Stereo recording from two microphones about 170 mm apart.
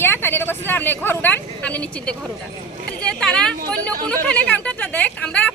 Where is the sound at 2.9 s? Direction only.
5° left (ahead or behind).